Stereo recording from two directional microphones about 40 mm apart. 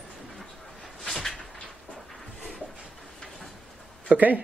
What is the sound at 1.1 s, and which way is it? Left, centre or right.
Cupboard open or close, centre.